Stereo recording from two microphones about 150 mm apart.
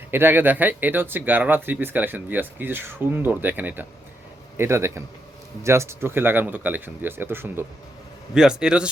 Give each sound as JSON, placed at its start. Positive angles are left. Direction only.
{"t": 0.1, "sound": "speech", "side_deg": -15}